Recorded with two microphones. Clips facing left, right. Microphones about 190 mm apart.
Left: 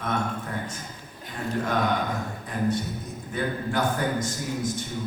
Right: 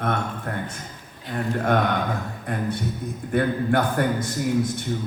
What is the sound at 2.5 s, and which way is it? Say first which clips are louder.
A man's voice: even; 60° right (ahead or behind).